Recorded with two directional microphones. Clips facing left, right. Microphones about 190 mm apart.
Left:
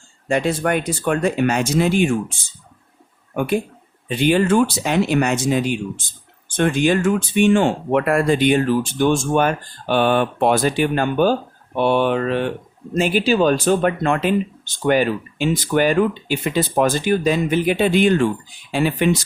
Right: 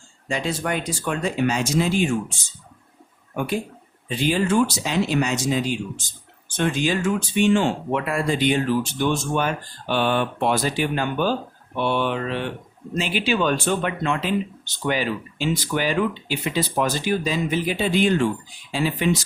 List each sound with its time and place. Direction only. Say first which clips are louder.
0.3 s speech: left 6 dB; 55° left (ahead or behind)
3.3 s speech: left 5 dB; 60° left (ahead or behind)